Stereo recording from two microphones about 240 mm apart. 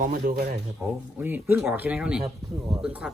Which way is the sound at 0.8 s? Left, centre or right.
Centre.